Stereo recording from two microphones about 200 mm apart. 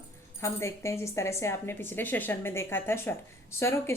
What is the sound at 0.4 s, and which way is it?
Speech, 15° left (ahead or behind).